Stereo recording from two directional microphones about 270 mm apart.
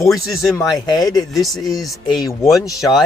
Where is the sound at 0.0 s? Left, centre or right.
Centre.